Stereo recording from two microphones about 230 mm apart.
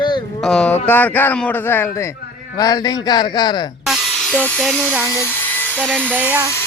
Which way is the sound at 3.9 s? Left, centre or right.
Centre.